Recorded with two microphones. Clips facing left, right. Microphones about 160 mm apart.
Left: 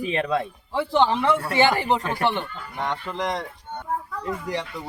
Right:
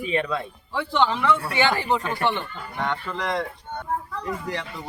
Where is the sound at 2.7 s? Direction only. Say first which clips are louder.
Even; 15° left (ahead or behind).